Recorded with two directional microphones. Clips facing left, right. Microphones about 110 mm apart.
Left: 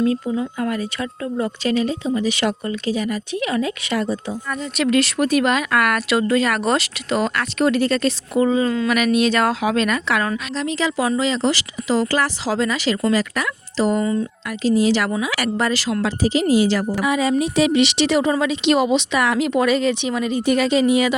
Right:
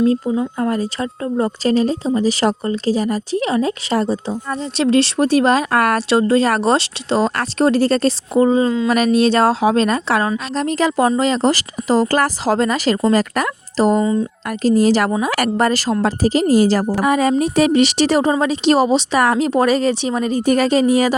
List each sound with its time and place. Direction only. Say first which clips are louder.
0.0 s speech: right 4 dB; 30° right (ahead or behind)